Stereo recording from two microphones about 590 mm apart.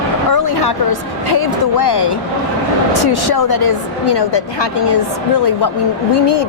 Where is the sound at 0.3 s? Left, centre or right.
Left.